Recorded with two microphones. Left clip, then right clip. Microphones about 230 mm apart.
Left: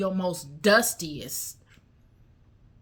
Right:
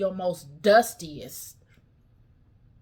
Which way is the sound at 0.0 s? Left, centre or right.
Centre.